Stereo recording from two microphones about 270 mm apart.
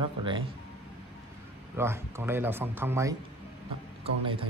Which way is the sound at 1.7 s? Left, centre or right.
Centre.